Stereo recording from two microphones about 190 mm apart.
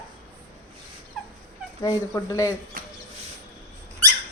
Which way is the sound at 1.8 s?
15° left (ahead or behind).